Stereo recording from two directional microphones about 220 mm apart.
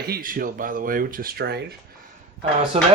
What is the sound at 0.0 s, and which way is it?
Speech, 40° right (ahead or behind).